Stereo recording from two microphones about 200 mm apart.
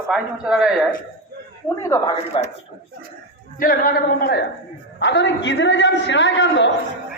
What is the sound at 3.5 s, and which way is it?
A man's voice, 45° left (ahead or behind).